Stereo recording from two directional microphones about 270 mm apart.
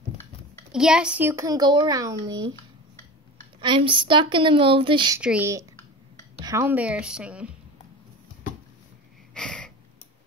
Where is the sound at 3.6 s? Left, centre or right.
Centre.